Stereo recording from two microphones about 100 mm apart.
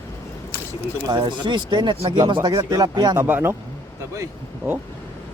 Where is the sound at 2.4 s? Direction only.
35° right (ahead or behind).